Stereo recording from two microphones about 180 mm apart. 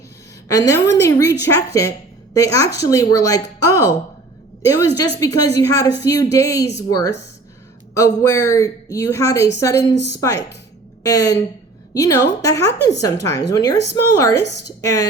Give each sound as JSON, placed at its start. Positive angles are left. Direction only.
{"t": 0.4, "sound": "a woman's voice", "side_deg": 20}